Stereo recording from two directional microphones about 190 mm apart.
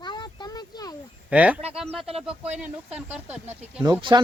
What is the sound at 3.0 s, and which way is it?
Speech, 5° right (ahead or behind).